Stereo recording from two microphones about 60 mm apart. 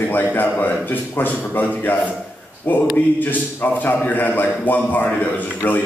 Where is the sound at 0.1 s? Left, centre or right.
Left.